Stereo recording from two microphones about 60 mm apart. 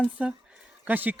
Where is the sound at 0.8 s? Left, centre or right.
Right.